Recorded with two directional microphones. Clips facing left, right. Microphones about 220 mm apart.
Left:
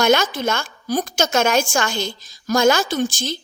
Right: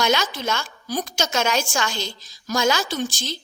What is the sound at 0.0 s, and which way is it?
A woman's voice, 50° left (ahead or behind).